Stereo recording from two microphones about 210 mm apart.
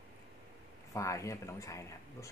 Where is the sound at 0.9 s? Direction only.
15° left (ahead or behind).